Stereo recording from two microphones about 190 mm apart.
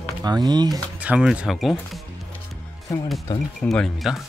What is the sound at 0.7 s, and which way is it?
Speech, 5° right (ahead or behind).